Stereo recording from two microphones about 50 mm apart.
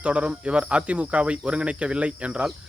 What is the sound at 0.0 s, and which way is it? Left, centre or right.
Speech, right.